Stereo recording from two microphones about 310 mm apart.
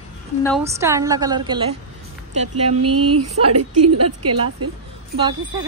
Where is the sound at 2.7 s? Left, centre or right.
Right.